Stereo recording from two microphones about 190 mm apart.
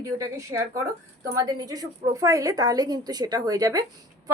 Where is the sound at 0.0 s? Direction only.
15° right (ahead or behind).